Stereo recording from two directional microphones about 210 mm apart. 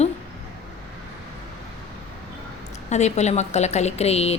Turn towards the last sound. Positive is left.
turn(degrees=30)  # may be behind; listen again after turning